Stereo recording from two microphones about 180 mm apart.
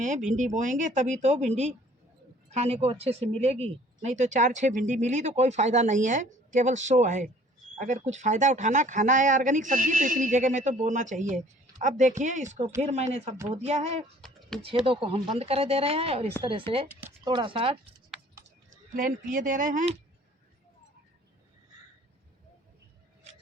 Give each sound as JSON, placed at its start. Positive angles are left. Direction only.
{"t": 0.0, "sound": "speech", "side_deg": -45}
{"t": 14.2, "sound": "a sound", "side_deg": 0}
{"t": 14.8, "sound": "speech", "side_deg": -30}
{"t": 18.9, "sound": "speech", "side_deg": -50}